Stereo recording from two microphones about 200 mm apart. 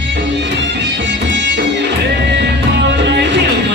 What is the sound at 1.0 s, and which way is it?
Music, 65° right (ahead or behind).